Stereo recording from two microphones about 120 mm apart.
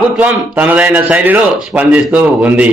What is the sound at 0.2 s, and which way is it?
A man's voice, 15° right (ahead or behind).